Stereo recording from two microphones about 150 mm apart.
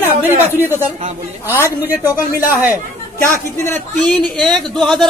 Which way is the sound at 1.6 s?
15° right (ahead or behind).